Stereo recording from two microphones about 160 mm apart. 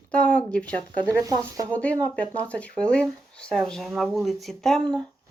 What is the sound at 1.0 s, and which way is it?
Speech, 20° right (ahead or behind).